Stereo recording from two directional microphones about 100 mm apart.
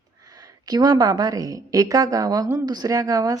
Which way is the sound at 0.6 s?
45° right (ahead or behind).